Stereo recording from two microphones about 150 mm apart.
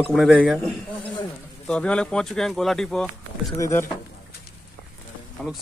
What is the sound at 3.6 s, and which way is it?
Speech, 15° left (ahead or behind).